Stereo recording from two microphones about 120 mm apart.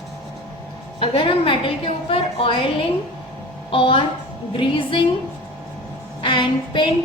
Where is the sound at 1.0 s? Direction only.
50° left (ahead or behind).